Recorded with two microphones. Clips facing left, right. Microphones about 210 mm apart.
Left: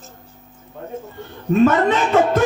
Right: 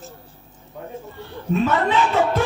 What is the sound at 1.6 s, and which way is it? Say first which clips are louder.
Music: left 5 dB; 45° left (ahead or behind).